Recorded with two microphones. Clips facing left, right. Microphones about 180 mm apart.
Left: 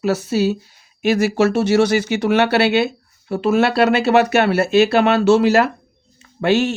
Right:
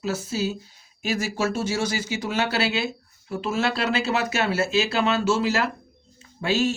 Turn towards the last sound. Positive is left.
turn(degrees=65)  # may be behind; listen again after turning